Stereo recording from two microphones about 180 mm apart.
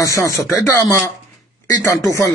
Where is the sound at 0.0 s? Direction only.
15° left (ahead or behind).